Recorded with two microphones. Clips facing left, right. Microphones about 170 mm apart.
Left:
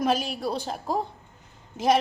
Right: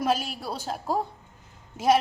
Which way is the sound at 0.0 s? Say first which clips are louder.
Left 2 dB; 5° right (ahead or behind).